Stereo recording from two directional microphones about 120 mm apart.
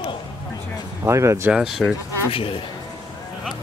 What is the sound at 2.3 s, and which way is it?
Speech, 50° left (ahead or behind).